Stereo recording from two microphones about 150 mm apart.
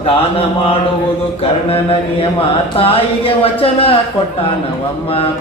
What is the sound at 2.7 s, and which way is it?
Speech, 40° left (ahead or behind).